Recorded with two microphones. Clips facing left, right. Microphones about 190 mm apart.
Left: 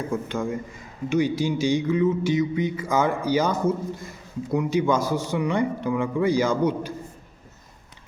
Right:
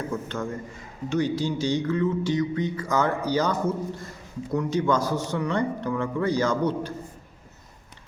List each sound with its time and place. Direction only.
0.1 s speech: 10° left (ahead or behind)